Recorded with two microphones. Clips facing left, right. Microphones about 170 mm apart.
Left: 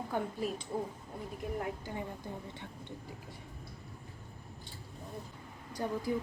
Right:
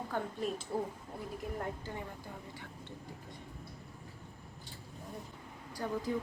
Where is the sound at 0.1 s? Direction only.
5° left (ahead or behind).